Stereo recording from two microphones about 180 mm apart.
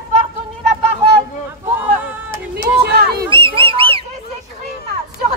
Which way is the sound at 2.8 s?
60° right (ahead or behind).